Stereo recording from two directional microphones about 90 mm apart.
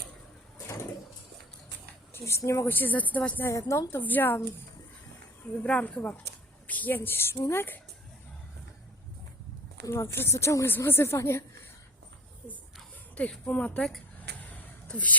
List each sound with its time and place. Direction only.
2.1 s speech: 30° left (ahead or behind)
3.7 s speech: 35° left (ahead or behind)
4.0 s speech: 20° left (ahead or behind)
5.6 s speech: 10° left (ahead or behind)
9.8 s speech: 30° left (ahead or behind)
13.1 s speech: 15° left (ahead or behind)
14.4 s a sound: 15° left (ahead or behind)